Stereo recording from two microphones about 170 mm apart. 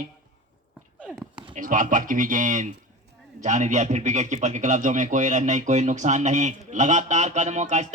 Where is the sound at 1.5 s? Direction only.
50° right (ahead or behind).